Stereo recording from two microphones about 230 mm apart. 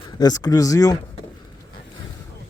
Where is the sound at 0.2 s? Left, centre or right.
Centre.